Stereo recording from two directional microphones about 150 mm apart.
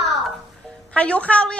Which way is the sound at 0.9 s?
10° left (ahead or behind).